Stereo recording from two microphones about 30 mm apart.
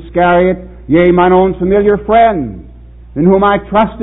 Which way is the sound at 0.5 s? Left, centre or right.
Centre.